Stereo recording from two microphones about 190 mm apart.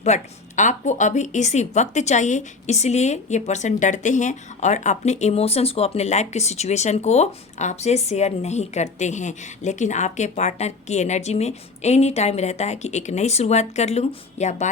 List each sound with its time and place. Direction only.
0.0 s speech: 40° left (ahead or behind)